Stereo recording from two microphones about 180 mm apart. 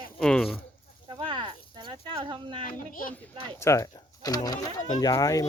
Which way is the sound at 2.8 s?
50° left (ahead or behind).